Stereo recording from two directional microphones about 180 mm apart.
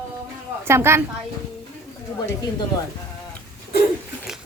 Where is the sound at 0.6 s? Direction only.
15° right (ahead or behind).